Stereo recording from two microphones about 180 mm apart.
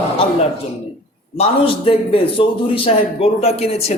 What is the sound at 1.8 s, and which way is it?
A man's voice, 30° left (ahead or behind).